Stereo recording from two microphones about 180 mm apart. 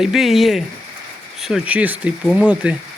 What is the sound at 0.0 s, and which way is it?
Speech, centre (ahead or behind).